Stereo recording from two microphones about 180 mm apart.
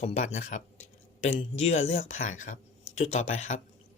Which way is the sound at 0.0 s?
40° left (ahead or behind).